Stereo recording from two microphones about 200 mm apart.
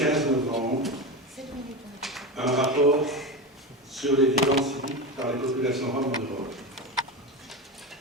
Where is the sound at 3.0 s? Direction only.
Centre (ahead or behind).